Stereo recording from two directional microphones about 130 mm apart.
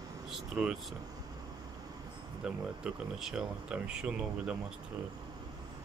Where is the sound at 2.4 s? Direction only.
5° right (ahead or behind).